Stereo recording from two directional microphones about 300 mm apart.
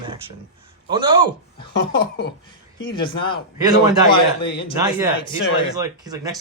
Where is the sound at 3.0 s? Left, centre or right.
Centre.